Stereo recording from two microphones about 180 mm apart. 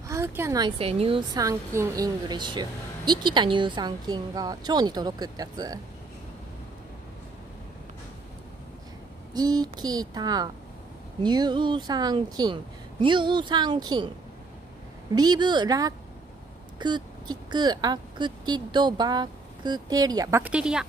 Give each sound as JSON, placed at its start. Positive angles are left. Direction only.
{"t": 0.1, "sound": "speech", "side_deg": -15}
{"t": 9.3, "sound": "speech", "side_deg": -20}
{"t": 15.1, "sound": "speech", "side_deg": -25}